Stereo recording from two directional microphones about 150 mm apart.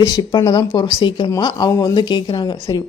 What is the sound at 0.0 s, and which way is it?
Speech, 25° left (ahead or behind).